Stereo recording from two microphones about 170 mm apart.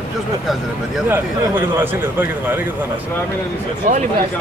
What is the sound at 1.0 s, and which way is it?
Speech, 15° right (ahead or behind).